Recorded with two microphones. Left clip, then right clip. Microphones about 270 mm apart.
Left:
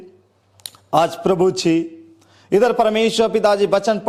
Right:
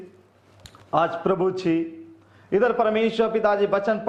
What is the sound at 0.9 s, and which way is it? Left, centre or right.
A man's voice, left.